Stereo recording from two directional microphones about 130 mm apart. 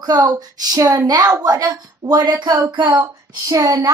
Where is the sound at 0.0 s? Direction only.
30° right (ahead or behind).